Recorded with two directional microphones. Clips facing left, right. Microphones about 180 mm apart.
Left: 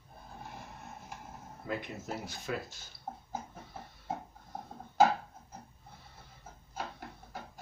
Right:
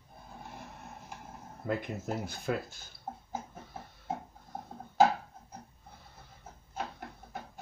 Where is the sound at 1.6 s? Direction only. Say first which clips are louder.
Right 4 dB; 50° right (ahead or behind).